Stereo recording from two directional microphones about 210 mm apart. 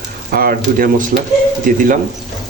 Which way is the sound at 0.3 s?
45° right (ahead or behind).